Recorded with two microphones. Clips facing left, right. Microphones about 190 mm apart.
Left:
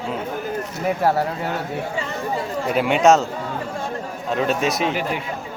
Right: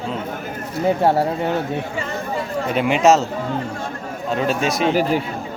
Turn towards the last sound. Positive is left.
turn(degrees=-35)  # may be behind; listen again after turning